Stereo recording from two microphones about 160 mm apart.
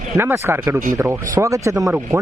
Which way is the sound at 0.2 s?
15° right (ahead or behind).